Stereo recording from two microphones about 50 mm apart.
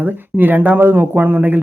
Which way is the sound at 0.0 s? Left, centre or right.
Right.